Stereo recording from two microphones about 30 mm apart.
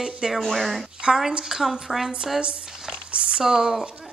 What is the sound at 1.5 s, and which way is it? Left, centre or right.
Speech, centre.